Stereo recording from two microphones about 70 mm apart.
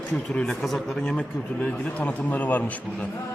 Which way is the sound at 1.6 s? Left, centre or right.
Centre.